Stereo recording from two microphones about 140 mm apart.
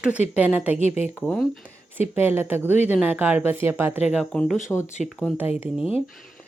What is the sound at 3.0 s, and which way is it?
A woman's voice, 15° right (ahead or behind).